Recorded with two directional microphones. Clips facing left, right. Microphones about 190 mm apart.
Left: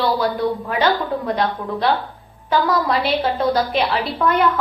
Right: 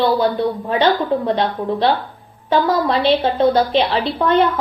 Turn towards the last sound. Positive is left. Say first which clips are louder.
# right 3 dB
turn(degrees=-25)  # may be behind; listen again after turning